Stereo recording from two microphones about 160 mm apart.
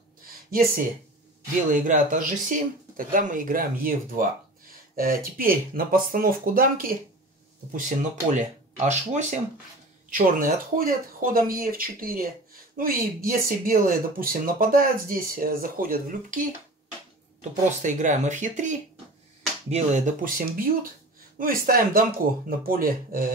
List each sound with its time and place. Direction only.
1.7 s speech: 55° right (ahead or behind)
10.0 s speech: 60° right (ahead or behind)